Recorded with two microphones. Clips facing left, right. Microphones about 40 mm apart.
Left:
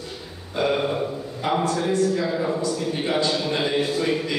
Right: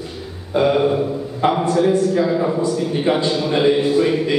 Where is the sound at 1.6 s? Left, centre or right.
Centre.